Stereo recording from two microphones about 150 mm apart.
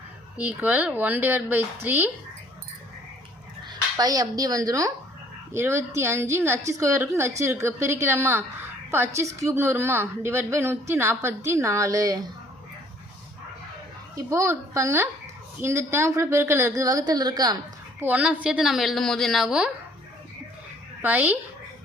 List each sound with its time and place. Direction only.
0.3 s a woman's voice: 10° right (ahead or behind)
3.7 s a woman's voice: 25° right (ahead or behind)
14.3 s a woman's voice: 20° right (ahead or behind)
18.0 s a woman's voice: 10° right (ahead or behind)
21.0 s a woman's voice: 10° right (ahead or behind)